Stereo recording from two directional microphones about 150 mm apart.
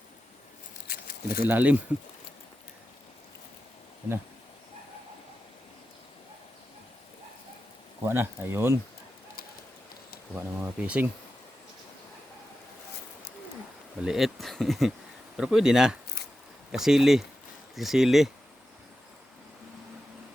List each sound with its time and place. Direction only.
0.9 s a sound: 75° left (ahead or behind)
1.5 s speech: 10° right (ahead or behind)
8.0 s speech: 15° right (ahead or behind)
10.3 s speech: 15° right (ahead or behind)
14.0 s speech: centre (ahead or behind)